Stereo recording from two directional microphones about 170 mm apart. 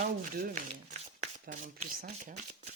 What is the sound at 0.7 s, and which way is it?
Shuffling cards, 45° right (ahead or behind).